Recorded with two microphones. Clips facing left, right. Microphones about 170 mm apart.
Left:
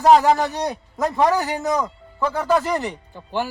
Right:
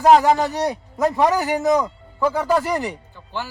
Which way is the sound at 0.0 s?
15° right (ahead or behind).